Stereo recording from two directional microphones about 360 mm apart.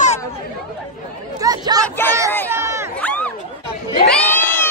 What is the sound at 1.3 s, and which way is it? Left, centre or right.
Speech, centre.